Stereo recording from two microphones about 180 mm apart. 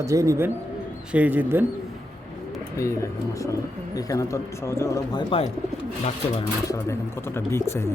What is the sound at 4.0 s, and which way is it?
Speech, 20° left (ahead or behind).